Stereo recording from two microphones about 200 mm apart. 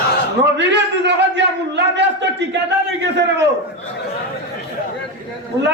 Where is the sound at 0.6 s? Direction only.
60° right (ahead or behind).